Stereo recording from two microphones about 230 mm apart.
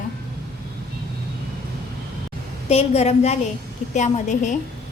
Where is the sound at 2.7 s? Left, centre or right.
Left.